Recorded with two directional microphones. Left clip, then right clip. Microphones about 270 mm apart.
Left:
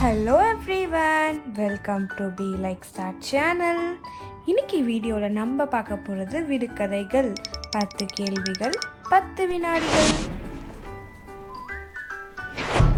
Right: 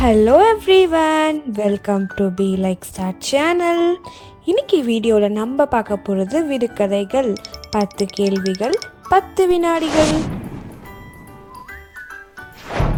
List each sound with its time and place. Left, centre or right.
0.0 s a woman's voice: right
7.9 s speech: centre
9.0 s a woman's voice: right
9.8 s a sound: centre
12.7 s music: centre